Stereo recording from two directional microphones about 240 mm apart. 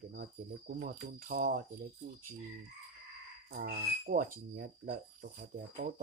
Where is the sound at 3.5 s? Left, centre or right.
Right.